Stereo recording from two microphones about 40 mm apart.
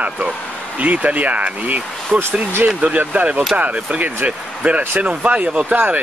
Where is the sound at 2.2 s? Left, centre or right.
Right.